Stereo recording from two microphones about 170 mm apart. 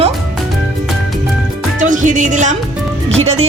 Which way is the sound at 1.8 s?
50° right (ahead or behind).